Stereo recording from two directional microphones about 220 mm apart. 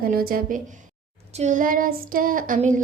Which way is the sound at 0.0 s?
40° right (ahead or behind).